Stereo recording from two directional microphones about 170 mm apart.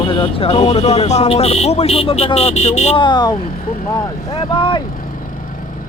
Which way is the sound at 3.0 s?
25° left (ahead or behind).